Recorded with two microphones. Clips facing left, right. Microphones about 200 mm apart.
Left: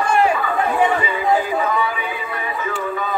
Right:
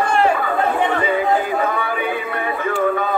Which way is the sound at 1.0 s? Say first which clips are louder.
Right 1 dB; 55° right (ahead or behind).